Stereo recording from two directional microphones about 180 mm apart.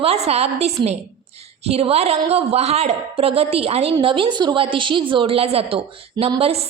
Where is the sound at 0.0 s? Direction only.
35° right (ahead or behind).